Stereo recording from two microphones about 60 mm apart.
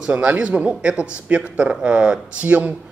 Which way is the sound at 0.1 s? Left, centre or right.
Right.